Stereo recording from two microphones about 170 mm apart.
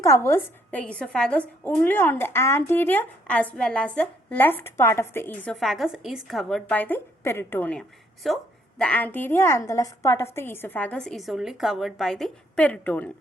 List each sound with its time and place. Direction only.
0.0 s a woman's voice: 15° left (ahead or behind)
5.5 s a woman's voice: centre (ahead or behind)